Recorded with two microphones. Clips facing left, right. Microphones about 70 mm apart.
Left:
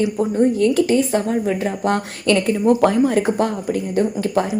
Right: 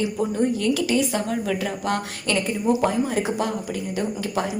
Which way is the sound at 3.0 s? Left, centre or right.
Left.